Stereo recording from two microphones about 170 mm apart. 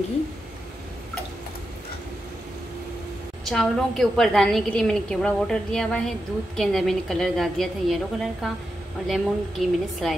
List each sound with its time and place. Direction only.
3.4 s a woman's voice: centre (ahead or behind)